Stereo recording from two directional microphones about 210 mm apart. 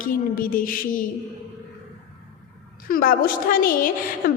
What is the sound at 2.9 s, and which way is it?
A woman's voice, 45° left (ahead or behind).